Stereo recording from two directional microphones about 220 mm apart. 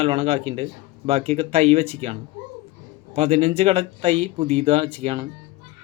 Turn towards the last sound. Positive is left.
turn(degrees=-25)  # may be behind; listen again after turning